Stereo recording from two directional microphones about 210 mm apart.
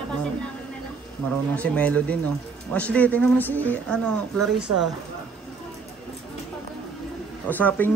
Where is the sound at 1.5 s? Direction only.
5° left (ahead or behind).